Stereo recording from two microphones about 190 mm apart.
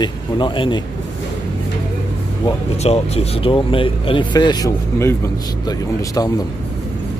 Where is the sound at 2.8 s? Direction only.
35° left (ahead or behind); by 6.2 s 15° left (ahead or behind).